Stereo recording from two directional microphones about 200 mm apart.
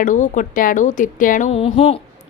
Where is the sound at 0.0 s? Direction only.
40° left (ahead or behind).